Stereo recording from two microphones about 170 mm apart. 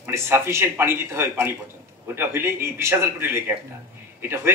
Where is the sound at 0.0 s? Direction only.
15° right (ahead or behind).